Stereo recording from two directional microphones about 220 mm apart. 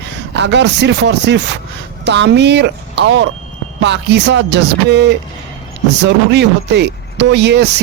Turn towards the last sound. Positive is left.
turn(degrees=-50)  # may be behind; listen again after turning